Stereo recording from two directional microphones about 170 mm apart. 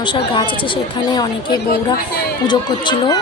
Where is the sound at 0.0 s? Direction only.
30° left (ahead or behind).